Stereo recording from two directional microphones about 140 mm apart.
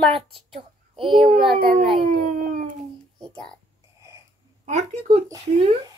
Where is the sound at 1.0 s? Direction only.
40° right (ahead or behind).